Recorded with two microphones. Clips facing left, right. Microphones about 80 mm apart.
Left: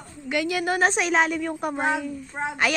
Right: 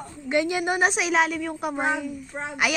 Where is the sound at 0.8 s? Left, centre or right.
Centre.